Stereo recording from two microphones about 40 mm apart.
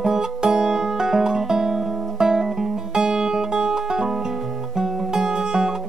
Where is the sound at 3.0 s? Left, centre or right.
Centre.